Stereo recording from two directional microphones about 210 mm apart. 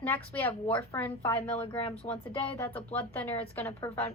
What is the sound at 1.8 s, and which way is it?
Speech, 30° left (ahead or behind).